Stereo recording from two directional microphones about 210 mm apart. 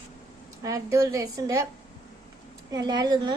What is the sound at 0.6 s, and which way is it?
A woman's voice, 15° right (ahead or behind).